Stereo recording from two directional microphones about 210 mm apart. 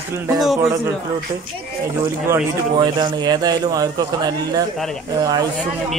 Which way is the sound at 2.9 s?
20° right (ahead or behind).